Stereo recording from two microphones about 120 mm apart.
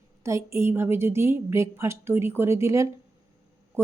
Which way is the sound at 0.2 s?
25° right (ahead or behind).